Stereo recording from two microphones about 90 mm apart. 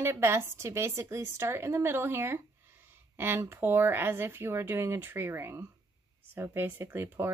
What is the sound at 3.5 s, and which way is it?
A woman's voice, 25° right (ahead or behind).